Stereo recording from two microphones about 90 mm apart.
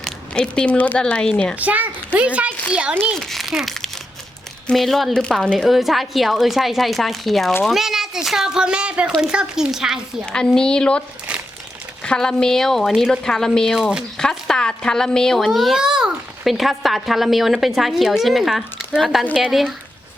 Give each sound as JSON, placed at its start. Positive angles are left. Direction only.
{"t": 0.0, "sound": "speech", "side_deg": 10}
{"t": 1.5, "sound": "a child's voice", "side_deg": -15}
{"t": 3.2, "sound": "a child's voice", "side_deg": 0}
{"t": 10.2, "sound": "a woman's voice", "side_deg": 10}
{"t": 12.0, "sound": "a woman's voice", "side_deg": 5}